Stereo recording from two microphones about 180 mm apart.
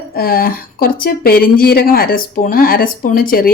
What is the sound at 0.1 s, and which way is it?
Speech, 55° left (ahead or behind).